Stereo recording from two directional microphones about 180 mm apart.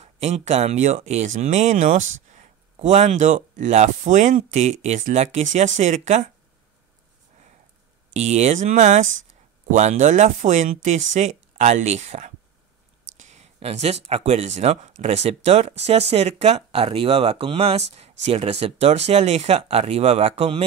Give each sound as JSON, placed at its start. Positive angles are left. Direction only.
{"t": 0.0, "sound": "speech", "side_deg": -35}
{"t": 8.1, "sound": "speech", "side_deg": -40}